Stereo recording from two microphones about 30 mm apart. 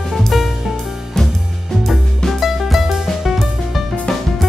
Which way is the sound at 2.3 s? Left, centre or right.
Centre.